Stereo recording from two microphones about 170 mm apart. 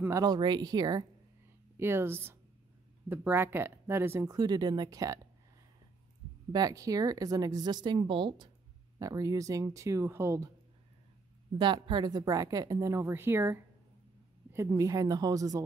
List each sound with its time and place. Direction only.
0.0 s a woman's voice: 20° right (ahead or behind)
6.5 s a woman's voice: 20° right (ahead or behind)
11.5 s a woman's voice: 30° right (ahead or behind)